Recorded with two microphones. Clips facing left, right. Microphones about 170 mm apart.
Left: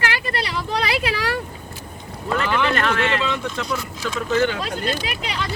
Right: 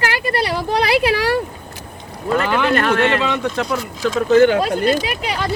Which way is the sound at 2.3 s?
45° right (ahead or behind).